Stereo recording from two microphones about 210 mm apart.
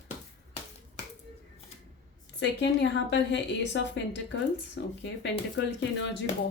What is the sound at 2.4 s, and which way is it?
A woman's voice, 60° left (ahead or behind).